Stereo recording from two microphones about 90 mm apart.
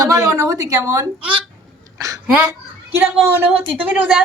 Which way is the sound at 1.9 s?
40° right (ahead or behind).